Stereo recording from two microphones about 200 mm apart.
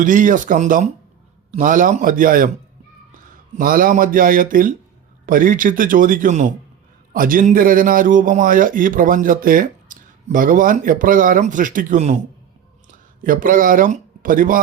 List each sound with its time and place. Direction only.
0.0 s a man's voice: 40° right (ahead or behind)
3.6 s a man's voice: 45° right (ahead or behind)